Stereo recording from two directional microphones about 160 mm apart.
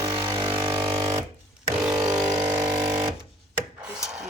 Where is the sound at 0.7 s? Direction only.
30° right (ahead or behind).